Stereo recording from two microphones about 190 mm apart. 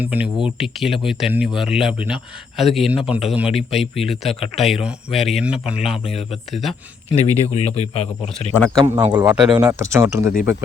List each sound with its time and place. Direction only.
0.0 s a man's voice: 10° right (ahead or behind)
7.1 s speech: 35° left (ahead or behind)
8.5 s speech: 5° left (ahead or behind)
9.1 s speech: 10° right (ahead or behind)